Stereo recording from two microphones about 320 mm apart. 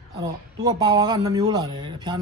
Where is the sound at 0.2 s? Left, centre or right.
Centre.